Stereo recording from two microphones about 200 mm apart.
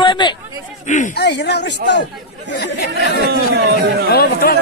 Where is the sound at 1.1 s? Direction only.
55° left (ahead or behind).